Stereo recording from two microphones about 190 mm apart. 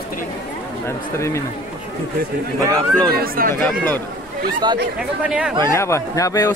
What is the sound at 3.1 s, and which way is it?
Speech, 50° right (ahead or behind).